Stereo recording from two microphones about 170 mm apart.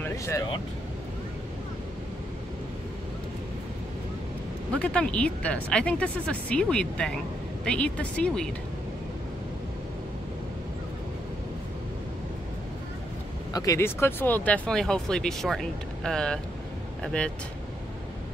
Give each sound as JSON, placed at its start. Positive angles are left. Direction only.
{"t": 0.0, "sound": "vehicle", "side_deg": 15}
{"t": 4.7, "sound": "speech", "side_deg": 5}
{"t": 13.5, "sound": "speech", "side_deg": 20}